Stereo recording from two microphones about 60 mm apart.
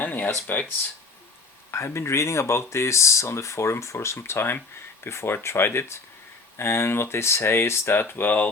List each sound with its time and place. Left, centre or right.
0.0 s a sound: left
0.5 s speech: left
1.7 s speech: left